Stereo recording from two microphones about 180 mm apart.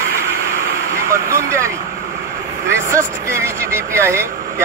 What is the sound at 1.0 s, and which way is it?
Speech, 15° right (ahead or behind).